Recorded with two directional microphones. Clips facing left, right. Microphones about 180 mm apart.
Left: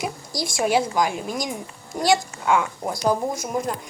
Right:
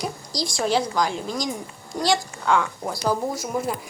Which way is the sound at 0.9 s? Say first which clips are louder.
Left 1 dB; 20° left (ahead or behind).